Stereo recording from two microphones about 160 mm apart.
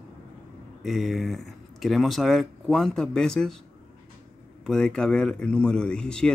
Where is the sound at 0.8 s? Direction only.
Centre (ahead or behind).